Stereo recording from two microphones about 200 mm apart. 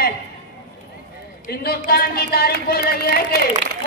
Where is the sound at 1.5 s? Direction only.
50° left (ahead or behind).